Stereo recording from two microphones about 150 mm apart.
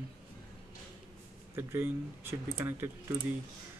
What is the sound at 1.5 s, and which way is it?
Speech, 15° right (ahead or behind).